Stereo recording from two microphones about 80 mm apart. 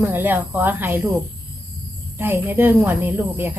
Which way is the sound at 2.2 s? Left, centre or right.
Right.